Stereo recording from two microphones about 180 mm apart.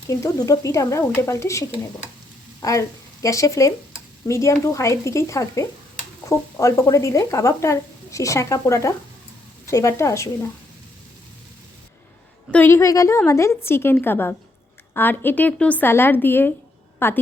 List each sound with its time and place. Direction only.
0.1 s speech: 15° left (ahead or behind)
12.5 s speech: 10° left (ahead or behind)